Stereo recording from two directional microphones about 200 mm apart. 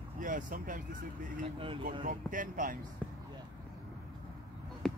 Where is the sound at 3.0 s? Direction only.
5° left (ahead or behind).